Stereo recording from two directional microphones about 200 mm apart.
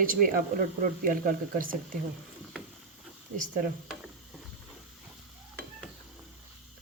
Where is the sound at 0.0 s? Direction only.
45° right (ahead or behind).